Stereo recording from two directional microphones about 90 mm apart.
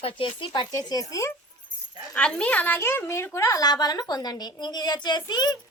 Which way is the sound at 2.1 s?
10° left (ahead or behind).